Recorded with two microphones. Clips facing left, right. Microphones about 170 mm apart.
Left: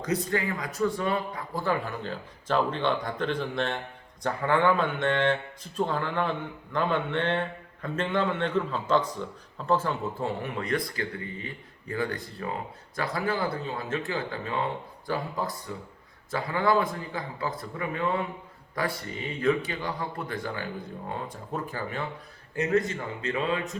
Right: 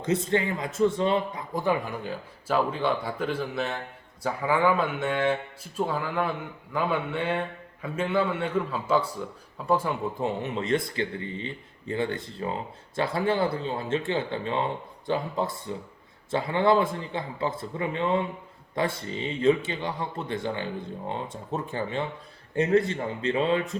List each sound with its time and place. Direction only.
0.0 s speech: 25° right (ahead or behind)